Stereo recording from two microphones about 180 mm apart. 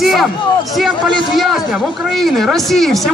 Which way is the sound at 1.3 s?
Centre (ahead or behind).